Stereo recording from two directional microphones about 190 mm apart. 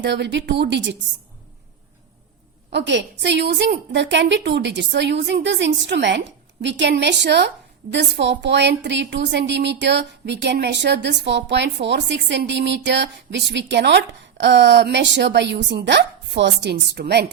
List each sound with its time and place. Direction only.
0.0 s a woman's voice: 65° right (ahead or behind)
2.7 s a woman's voice: 70° right (ahead or behind)